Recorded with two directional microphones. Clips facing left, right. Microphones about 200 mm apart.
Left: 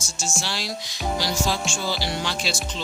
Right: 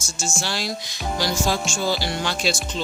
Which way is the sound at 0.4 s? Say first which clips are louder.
Right 3 dB; 50° right (ahead or behind).